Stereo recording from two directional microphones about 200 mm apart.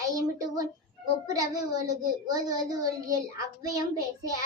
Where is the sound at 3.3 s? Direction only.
20° right (ahead or behind).